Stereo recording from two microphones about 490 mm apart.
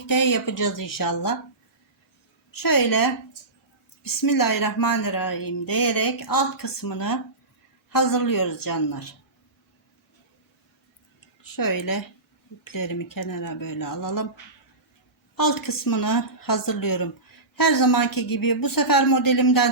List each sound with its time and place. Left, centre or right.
0.1 s speech: left
2.5 s a woman's voice: left
11.5 s speech: left
15.4 s a woman's voice: left